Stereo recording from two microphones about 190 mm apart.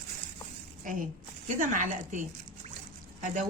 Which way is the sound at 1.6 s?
40° right (ahead or behind).